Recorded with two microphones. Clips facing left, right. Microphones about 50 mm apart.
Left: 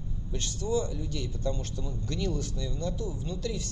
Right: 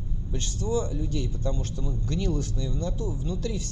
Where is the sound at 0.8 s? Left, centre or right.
Right.